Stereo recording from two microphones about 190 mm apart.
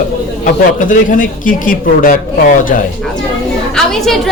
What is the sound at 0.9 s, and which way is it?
Speech, 45° left (ahead or behind).